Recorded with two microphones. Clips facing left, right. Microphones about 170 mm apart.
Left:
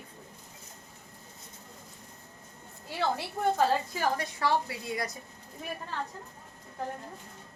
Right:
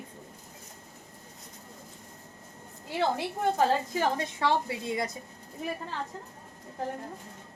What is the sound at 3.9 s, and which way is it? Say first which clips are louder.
A woman's voice: right 2 dB; 25° right (ahead or behind).